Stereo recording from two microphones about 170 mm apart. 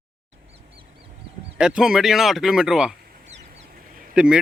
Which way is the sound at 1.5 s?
5° right (ahead or behind).